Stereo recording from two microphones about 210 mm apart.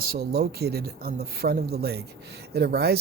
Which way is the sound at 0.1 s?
50° right (ahead or behind).